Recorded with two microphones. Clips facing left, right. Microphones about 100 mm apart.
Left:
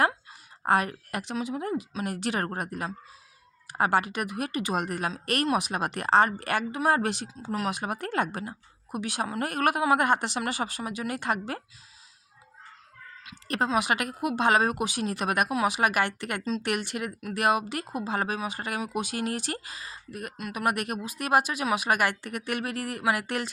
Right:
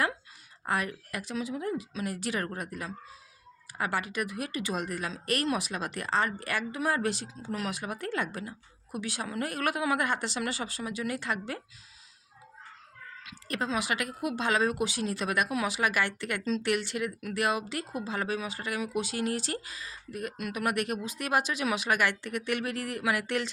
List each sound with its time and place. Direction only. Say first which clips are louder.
0.7 s speech: left 6 dB; 65° left (ahead or behind)
13.3 s speech: left 5 dB; 60° left (ahead or behind); by 16.6 s 40° left (ahead or behind)
16.6 s speech: even; 55° left (ahead or behind)